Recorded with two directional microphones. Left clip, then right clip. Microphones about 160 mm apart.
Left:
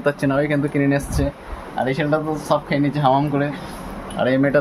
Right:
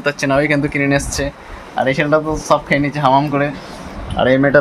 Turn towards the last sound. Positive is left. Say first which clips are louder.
# right 5 dB
turn(degrees=-45)  # may be behind; listen again after turning